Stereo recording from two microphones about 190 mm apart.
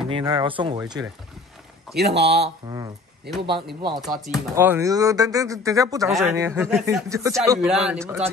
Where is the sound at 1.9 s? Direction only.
60° right (ahead or behind).